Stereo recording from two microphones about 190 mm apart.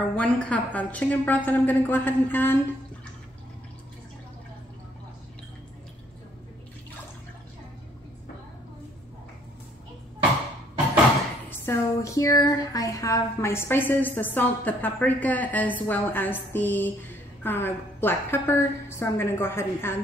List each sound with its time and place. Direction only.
0.1 s speech: 5° left (ahead or behind)
11.6 s speech: 15° left (ahead or behind)